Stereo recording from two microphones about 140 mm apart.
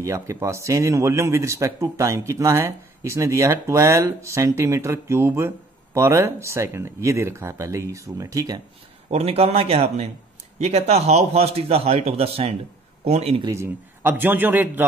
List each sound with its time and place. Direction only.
0.0 s speech: 20° right (ahead or behind)
9.1 s a man's voice: 45° right (ahead or behind)
13.5 s a man's voice: 15° right (ahead or behind)